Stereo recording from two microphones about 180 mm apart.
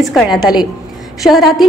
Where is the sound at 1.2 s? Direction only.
Centre (ahead or behind).